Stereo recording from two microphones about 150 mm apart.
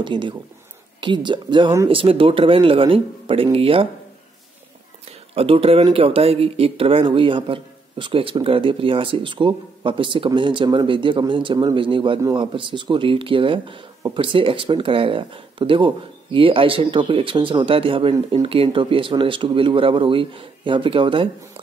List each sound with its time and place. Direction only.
0.0 s speech: 30° right (ahead or behind)
5.3 s speech: 40° right (ahead or behind)